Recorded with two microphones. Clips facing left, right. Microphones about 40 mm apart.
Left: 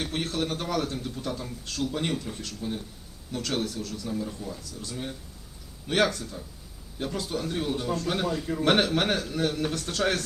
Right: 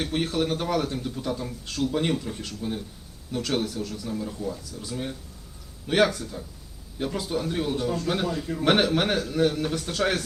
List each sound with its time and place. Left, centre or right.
0.0 s a man's voice: centre